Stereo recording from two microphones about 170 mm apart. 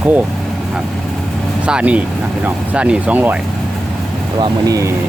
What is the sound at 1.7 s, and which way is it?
Speech, 5° right (ahead or behind).